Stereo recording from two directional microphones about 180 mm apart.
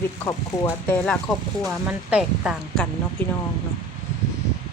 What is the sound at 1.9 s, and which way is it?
Speech, 5° right (ahead or behind).